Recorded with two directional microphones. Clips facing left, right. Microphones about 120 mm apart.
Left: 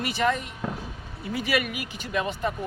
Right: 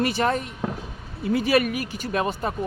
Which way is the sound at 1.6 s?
45° right (ahead or behind).